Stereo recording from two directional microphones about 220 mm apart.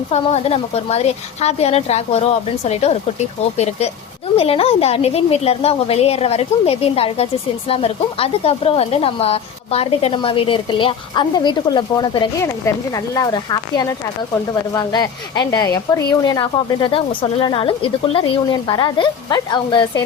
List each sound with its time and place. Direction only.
0.1 s speech: 30° left (ahead or behind)
4.4 s speech: 25° left (ahead or behind)